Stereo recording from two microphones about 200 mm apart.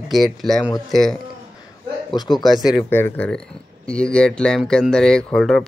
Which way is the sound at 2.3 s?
Centre (ahead or behind).